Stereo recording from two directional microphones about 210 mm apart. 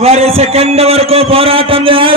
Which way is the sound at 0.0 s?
30° right (ahead or behind).